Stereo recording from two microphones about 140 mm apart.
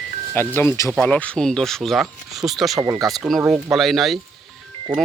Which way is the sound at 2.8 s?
25° right (ahead or behind).